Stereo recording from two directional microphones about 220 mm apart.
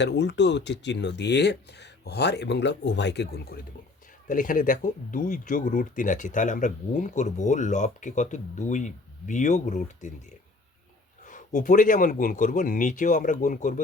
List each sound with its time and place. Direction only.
0.0 s speech: 50° left (ahead or behind); by 10.1 s 35° left (ahead or behind)
11.3 s speech: 35° left (ahead or behind)